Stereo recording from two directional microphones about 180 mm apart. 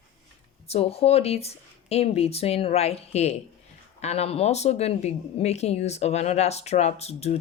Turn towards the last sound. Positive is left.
turn(degrees=35)  # may be behind; listen again after turning